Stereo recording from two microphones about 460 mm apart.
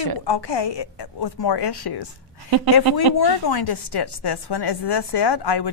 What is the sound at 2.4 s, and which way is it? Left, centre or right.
Speech, right.